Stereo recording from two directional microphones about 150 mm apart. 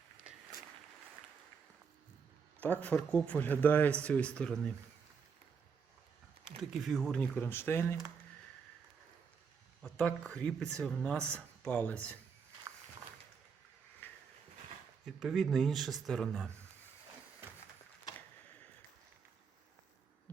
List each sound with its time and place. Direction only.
2.6 s speech: 10° left (ahead or behind)
6.6 s speech: centre (ahead or behind); by 7.9 s 15° left (ahead or behind)
9.8 s speech: 5° left (ahead or behind)
14.0 s a sound: 15° left (ahead or behind)
15.0 s speech: centre (ahead or behind)